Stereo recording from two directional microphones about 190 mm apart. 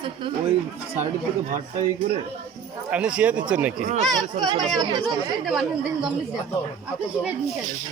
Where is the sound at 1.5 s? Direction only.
35° right (ahead or behind).